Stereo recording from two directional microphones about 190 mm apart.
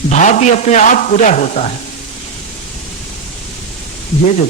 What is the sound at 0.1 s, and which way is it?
A man's voice, 40° left (ahead or behind).